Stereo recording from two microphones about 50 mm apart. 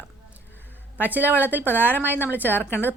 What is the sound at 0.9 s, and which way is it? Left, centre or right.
A woman's voice, right.